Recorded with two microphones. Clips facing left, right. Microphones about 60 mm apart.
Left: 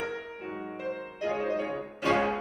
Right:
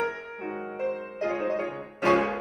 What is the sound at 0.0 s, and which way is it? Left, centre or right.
Music, right.